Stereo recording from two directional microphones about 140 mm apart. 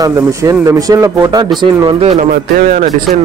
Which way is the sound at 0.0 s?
25° right (ahead or behind).